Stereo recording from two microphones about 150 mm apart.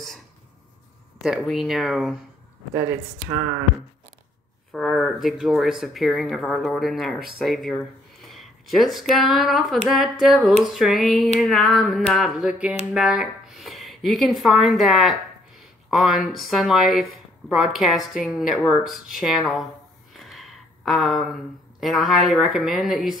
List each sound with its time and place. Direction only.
1.2 s speech: centre (ahead or behind)
2.7 s speech: 15° right (ahead or behind)
4.7 s a woman's voice: centre (ahead or behind)